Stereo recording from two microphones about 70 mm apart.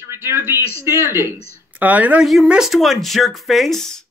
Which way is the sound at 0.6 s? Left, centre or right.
Left.